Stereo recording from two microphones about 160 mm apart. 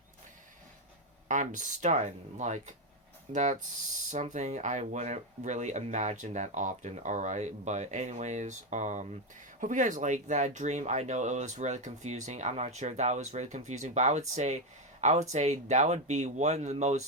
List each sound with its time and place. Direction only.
1.3 s speech: 50° right (ahead or behind)